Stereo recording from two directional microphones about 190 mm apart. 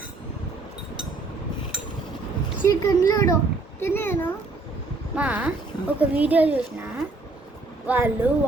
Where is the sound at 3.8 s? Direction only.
15° left (ahead or behind).